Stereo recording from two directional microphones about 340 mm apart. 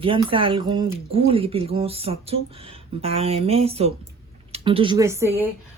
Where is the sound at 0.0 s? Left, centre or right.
Centre.